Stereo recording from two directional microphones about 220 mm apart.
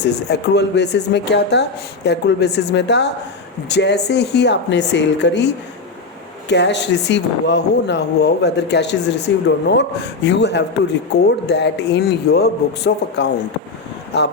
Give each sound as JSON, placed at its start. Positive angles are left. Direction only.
{"t": 0.0, "sound": "speech", "side_deg": 50}
{"t": 6.5, "sound": "speech", "side_deg": 50}